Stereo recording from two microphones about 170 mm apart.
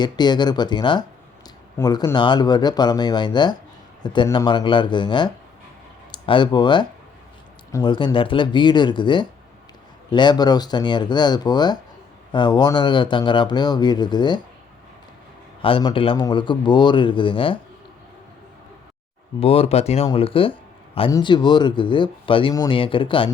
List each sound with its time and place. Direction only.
0.0 s speech: 25° left (ahead or behind)
15.6 s speech: 30° left (ahead or behind)
19.4 s speech: 35° left (ahead or behind)